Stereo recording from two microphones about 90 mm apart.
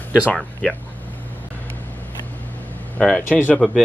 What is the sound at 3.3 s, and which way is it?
Speech, 20° left (ahead or behind).